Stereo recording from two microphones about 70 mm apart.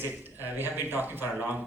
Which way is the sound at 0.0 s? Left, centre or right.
Right.